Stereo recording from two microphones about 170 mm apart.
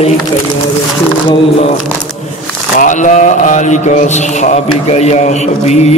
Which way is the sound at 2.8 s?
45° left (ahead or behind).